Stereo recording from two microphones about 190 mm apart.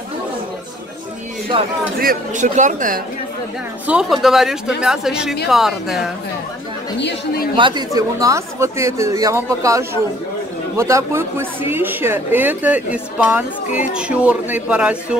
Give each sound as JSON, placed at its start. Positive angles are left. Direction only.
{"t": 1.5, "sound": "speech", "side_deg": -25}
{"t": 2.0, "sound": "speech", "side_deg": -45}
{"t": 3.8, "sound": "speech", "side_deg": -5}
{"t": 7.0, "sound": "a woman's voice", "side_deg": 65}
{"t": 7.5, "sound": "a woman's voice", "side_deg": -25}